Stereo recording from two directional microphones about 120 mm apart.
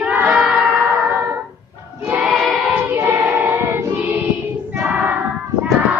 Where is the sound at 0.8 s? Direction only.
20° right (ahead or behind).